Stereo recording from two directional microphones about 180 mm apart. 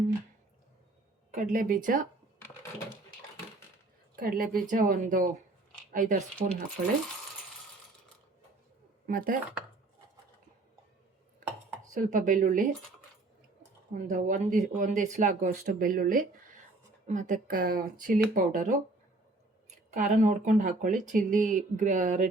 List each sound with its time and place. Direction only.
1.5 s speech: 50° right (ahead or behind)
4.1 s speech: 55° right (ahead or behind)
9.0 s speech: 50° right (ahead or behind)
11.9 s speech: 45° right (ahead or behind)
13.9 s speech: 45° right (ahead or behind)
19.9 s speech: 45° right (ahead or behind)